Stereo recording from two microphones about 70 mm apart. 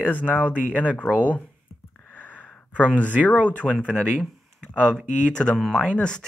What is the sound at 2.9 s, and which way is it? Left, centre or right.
Speech, left.